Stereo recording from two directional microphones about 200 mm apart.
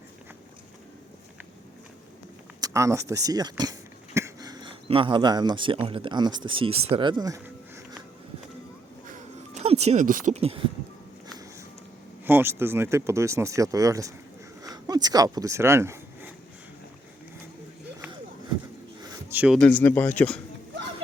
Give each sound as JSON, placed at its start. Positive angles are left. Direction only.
{"t": 2.6, "sound": "throat clearing", "side_deg": -15}
{"t": 5.9, "sound": "speech", "side_deg": -25}
{"t": 9.1, "sound": "music", "side_deg": -30}
{"t": 12.2, "sound": "speech", "side_deg": -10}
{"t": 14.6, "sound": "a sound", "side_deg": -20}
{"t": 19.3, "sound": "a sound", "side_deg": -10}
{"t": 19.5, "sound": "speech", "side_deg": 5}